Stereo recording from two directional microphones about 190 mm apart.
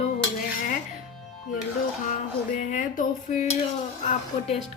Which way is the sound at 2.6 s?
40° left (ahead or behind).